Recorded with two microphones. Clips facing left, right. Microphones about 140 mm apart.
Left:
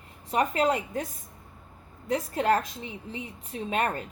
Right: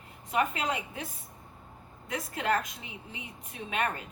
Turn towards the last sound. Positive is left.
turn(degrees=35)  # may be behind; listen again after turning